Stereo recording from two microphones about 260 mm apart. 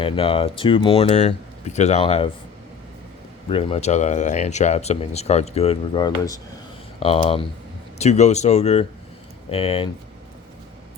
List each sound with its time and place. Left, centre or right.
0.0 s speech: left
3.5 s speech: left